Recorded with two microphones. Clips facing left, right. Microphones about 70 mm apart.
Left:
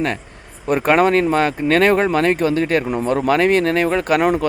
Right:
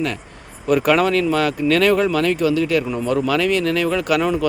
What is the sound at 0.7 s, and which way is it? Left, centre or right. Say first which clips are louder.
Speech: left 1 dB; left.